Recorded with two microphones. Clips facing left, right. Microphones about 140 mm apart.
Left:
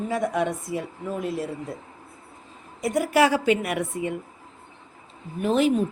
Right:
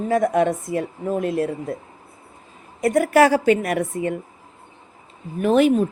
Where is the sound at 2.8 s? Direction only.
50° right (ahead or behind).